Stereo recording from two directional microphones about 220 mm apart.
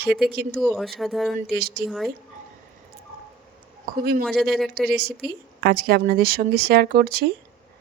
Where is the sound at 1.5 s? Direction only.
45° right (ahead or behind).